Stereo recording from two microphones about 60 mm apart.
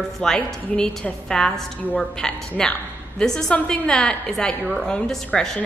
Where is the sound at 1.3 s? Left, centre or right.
Centre.